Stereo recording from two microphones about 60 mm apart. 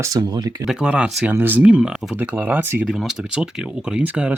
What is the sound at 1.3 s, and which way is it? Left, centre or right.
Speech, right.